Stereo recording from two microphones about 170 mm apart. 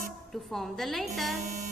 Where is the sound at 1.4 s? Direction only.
40° right (ahead or behind).